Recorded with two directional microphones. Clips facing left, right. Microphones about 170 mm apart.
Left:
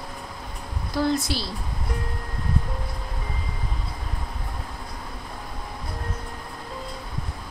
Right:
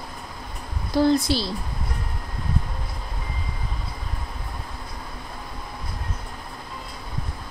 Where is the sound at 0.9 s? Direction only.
30° right (ahead or behind).